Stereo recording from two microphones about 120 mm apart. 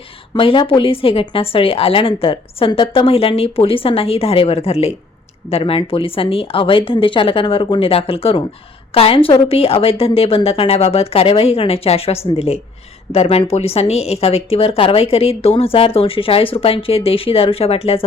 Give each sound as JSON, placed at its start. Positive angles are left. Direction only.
{"t": 0.3, "sound": "speech", "side_deg": 45}